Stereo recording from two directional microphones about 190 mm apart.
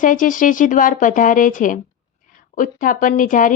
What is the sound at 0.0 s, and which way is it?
Speech, 45° left (ahead or behind).